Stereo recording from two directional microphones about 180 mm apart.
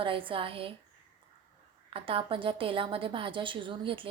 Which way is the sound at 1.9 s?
30° right (ahead or behind).